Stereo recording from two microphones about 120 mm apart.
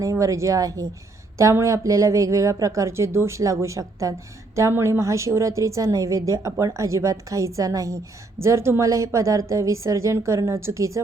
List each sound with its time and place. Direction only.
0.0 s a woman's voice: 25° right (ahead or behind)